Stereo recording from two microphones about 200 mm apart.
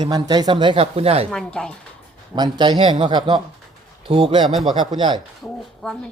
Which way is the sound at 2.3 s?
20° right (ahead or behind).